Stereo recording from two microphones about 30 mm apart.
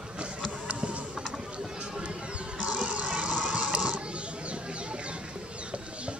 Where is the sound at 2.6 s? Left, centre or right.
Right.